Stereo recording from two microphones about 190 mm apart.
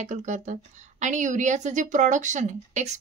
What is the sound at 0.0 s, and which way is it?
A woman's voice, 40° right (ahead or behind).